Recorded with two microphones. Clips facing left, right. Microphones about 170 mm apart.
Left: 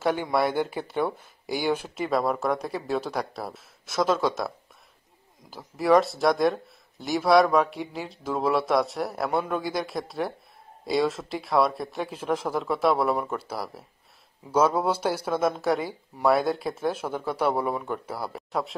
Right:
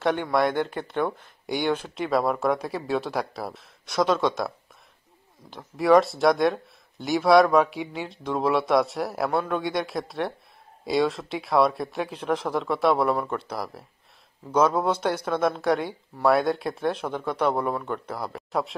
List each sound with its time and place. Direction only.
0.0 s speech: 5° left (ahead or behind)
5.5 s speech: 5° left (ahead or behind)